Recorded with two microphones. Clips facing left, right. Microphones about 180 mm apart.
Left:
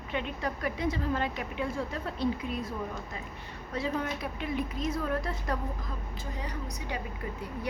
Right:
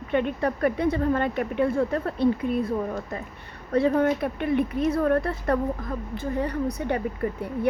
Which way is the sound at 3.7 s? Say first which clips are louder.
Right 11 dB; 55° right (ahead or behind).